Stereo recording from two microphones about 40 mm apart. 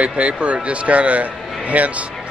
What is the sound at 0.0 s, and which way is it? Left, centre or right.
Speech, right.